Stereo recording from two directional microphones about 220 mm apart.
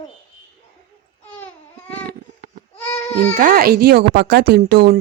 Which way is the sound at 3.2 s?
40° right (ahead or behind).